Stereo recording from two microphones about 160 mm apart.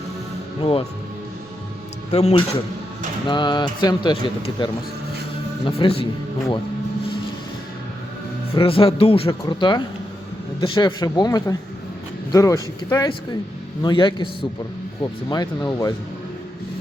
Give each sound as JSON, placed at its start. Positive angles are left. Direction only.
{"t": 0.6, "sound": "a man's voice", "side_deg": 35}
{"t": 2.1, "sound": "speech", "side_deg": 40}
{"t": 3.2, "sound": "a man's voice", "side_deg": 30}
{"t": 8.5, "sound": "a man's voice", "side_deg": 35}